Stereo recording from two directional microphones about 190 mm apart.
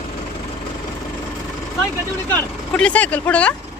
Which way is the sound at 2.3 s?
5° left (ahead or behind).